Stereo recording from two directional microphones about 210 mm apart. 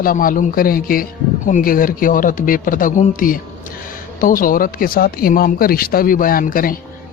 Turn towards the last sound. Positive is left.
turn(degrees=40)  # may be behind; listen again after turning